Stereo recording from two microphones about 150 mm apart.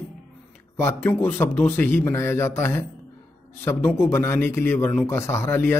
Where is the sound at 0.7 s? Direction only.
15° left (ahead or behind).